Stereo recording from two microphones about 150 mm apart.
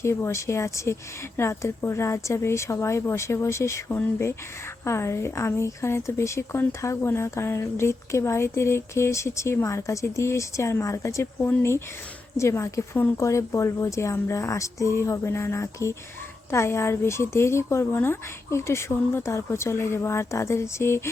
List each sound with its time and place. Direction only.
0.0 s speech: 15° left (ahead or behind)